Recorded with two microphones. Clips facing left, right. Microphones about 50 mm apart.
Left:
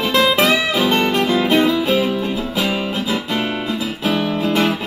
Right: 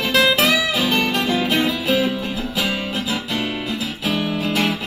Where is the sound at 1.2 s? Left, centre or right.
Left.